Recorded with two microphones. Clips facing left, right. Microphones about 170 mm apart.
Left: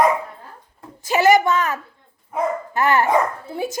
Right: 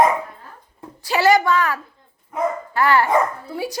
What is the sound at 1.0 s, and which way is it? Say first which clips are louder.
A woman's voice: left 1 dB; 20° left (ahead or behind).